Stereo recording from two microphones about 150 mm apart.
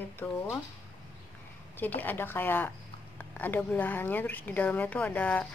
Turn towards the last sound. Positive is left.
turn(degrees=10)  # may be behind; listen again after turning